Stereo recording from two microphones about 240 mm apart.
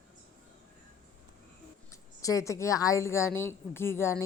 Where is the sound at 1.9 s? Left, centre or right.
Centre.